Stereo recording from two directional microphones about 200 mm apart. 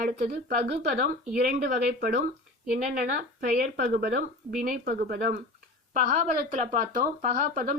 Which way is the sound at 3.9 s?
40° right (ahead or behind).